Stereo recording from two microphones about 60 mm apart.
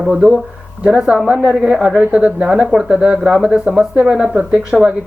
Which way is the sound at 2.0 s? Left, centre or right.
Right.